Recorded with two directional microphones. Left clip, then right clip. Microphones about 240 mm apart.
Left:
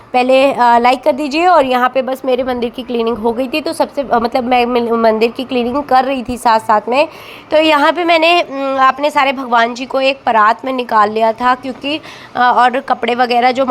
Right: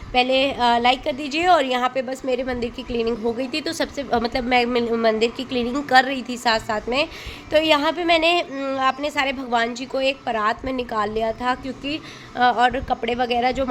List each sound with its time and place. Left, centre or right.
0.1 s a woman's voice: left; by 13.7 s centre